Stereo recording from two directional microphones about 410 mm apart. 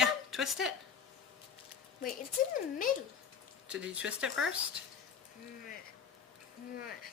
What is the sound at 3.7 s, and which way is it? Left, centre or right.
Speech, centre.